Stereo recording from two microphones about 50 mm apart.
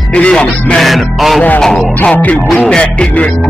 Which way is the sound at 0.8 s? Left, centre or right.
Centre.